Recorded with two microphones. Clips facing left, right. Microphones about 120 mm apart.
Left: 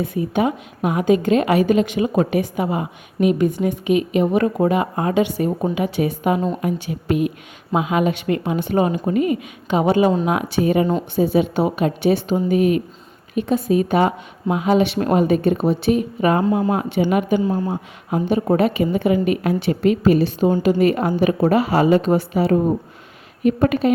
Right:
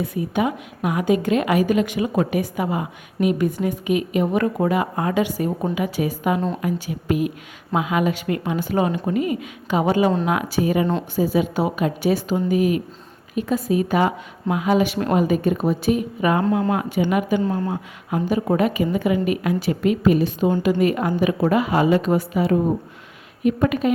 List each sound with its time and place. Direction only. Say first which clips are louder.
0.0 s a woman's voice: left 2 dB; 25° left (ahead or behind)
9.1 s a woman's voice: left 5 dB; 25° right (ahead or behind)
9.6 s a woman's voice: left 2 dB; 25° left (ahead or behind)
16.4 s speech: left 2 dB; 10° left (ahead or behind)
17.0 s a woman's voice: left 3 dB; 30° left (ahead or behind)
17.4 s speech: left 2 dB; 15° left (ahead or behind)
18.1 s a woman's voice: left 2 dB; 30° left (ahead or behind)